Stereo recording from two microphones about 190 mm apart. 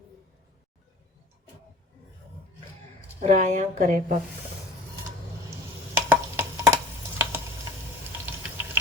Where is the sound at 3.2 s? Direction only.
40° right (ahead or behind).